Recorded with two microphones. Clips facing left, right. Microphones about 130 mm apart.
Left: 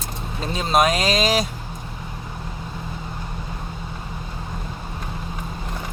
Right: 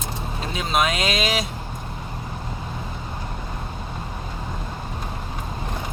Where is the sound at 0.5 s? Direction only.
35° left (ahead or behind).